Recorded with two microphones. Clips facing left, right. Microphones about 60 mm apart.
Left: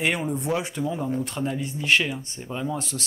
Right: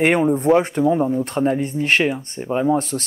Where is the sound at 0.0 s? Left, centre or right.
Right.